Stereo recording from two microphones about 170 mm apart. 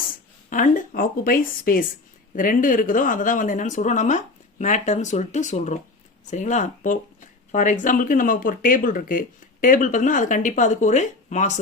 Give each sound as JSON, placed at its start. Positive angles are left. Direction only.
{"t": 0.1, "sound": "speech", "side_deg": 50}